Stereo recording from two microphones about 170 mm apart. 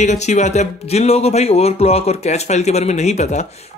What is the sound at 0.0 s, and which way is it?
Speech, 45° left (ahead or behind).